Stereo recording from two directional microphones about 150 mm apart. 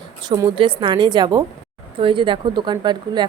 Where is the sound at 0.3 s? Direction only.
35° right (ahead or behind).